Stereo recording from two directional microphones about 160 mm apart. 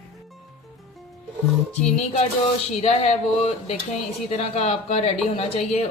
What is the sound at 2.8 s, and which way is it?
Speech, 40° left (ahead or behind).